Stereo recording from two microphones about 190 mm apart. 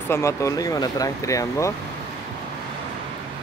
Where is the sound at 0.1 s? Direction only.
15° left (ahead or behind).